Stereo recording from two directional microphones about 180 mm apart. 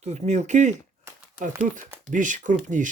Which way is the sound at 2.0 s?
45° right (ahead or behind).